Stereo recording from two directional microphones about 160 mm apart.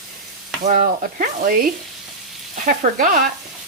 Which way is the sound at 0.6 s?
55° right (ahead or behind).